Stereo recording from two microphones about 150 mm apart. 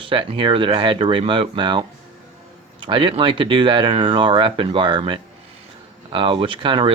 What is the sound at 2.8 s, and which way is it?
Speech, 35° right (ahead or behind).